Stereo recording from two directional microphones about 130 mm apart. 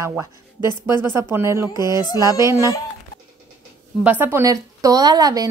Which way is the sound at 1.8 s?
30° left (ahead or behind).